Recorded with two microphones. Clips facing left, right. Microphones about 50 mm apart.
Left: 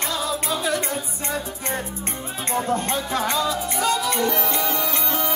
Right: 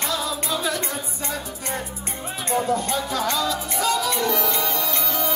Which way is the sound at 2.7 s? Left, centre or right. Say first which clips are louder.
Even; left.